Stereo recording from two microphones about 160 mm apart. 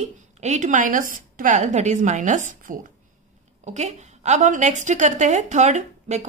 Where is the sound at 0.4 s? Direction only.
50° right (ahead or behind).